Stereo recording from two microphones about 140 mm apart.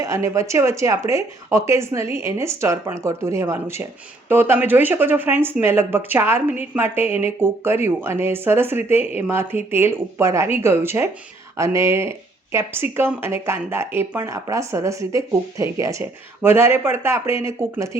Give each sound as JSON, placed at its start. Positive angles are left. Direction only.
{"t": 0.0, "sound": "speech", "side_deg": -20}